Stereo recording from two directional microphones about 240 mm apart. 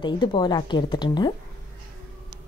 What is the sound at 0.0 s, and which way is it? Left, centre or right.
Speech, centre.